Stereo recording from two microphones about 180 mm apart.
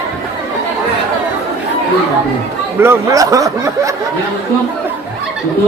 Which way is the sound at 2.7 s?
15° right (ahead or behind).